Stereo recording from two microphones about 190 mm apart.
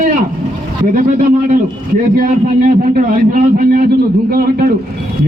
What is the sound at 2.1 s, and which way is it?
A man's voice, 50° right (ahead or behind).